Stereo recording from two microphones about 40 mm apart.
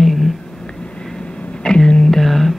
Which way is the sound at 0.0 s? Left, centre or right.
Centre.